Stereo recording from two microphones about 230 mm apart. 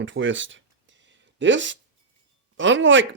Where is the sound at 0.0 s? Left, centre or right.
Right.